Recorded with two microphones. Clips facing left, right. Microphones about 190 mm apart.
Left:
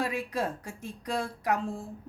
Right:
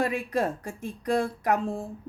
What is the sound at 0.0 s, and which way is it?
A woman's voice, 55° right (ahead or behind).